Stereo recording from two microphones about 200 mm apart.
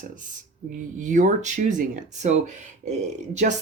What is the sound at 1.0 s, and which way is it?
Speech, 40° right (ahead or behind).